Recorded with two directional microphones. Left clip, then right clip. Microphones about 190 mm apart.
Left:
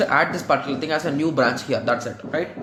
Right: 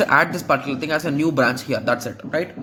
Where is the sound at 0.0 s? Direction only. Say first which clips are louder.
Right 2 dB; 35° right (ahead or behind).